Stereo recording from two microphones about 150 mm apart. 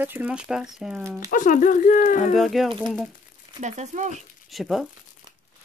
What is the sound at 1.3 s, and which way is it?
Speech, 60° left (ahead or behind).